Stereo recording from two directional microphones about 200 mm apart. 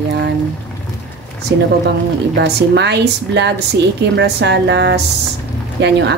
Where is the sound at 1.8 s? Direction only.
60° right (ahead or behind).